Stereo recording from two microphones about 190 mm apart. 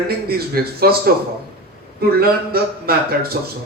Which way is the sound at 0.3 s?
55° right (ahead or behind).